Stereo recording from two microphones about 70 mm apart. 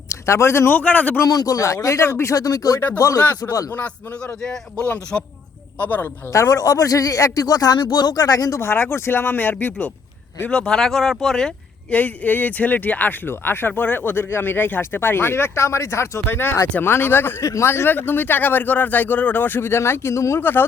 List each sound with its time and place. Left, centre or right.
0.1 s a man's voice: left
0.7 s speech: left
1.2 s speech: left
2.3 s a man's voice: left
3.2 s speech: left
4.8 s speech: centre
6.3 s a man's voice: left
8.6 s speech: left
10.5 s speech: centre
11.9 s speech: left
17.4 s speech: left
20.4 s speech: left